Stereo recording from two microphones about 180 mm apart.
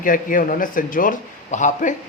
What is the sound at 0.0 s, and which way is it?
A man's voice, 50° left (ahead or behind).